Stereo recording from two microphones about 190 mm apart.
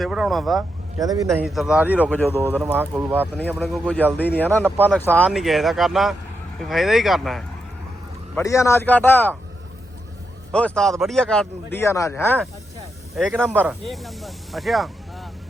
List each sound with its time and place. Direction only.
0.0 s speech: centre (ahead or behind)
1.0 s a man's voice: 20° right (ahead or behind)
1.3 s speech: centre (ahead or behind)
2.0 s a man's voice: 10° left (ahead or behind)
2.6 s speech: 10° right (ahead or behind)
3.6 s a man's voice: 5° left (ahead or behind)
8.4 s a man's voice: 15° left (ahead or behind)
10.5 s speech: 5° left (ahead or behind)